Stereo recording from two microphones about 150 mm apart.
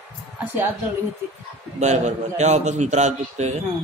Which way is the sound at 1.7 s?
50° right (ahead or behind).